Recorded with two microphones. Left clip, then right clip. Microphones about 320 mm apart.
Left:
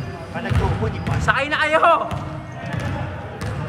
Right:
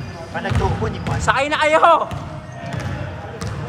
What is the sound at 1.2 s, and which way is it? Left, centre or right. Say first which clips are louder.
Speech: right 2 dB; centre.